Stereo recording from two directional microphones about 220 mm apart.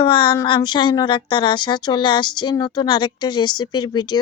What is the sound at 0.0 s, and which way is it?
Speech, 20° left (ahead or behind).